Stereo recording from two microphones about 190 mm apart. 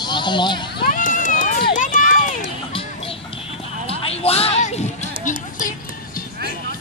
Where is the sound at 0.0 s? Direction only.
25° left (ahead or behind).